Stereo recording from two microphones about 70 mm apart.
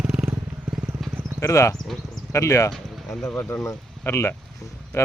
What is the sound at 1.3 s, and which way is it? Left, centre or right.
Speech, left.